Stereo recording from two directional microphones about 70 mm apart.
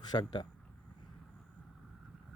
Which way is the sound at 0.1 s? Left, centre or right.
Left.